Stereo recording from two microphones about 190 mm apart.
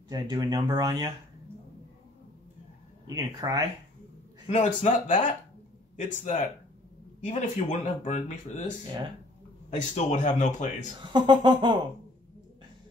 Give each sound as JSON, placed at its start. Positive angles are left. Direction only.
{"t": 0.1, "sound": "speech", "side_deg": -20}
{"t": 3.2, "sound": "speech", "side_deg": -20}
{"t": 4.5, "sound": "speech", "side_deg": 35}
{"t": 9.9, "sound": "speech", "side_deg": 40}
{"t": 11.1, "sound": "speech", "side_deg": -25}